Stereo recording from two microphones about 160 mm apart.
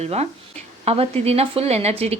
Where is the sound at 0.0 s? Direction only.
40° right (ahead or behind).